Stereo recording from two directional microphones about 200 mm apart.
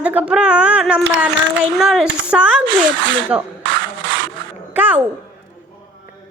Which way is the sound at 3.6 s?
70° right (ahead or behind).